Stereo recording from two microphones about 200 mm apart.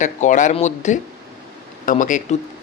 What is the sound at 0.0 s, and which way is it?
Speech, 40° left (ahead or behind).